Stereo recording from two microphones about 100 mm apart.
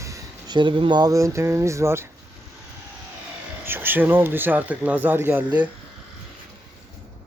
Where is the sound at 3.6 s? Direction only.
20° right (ahead or behind).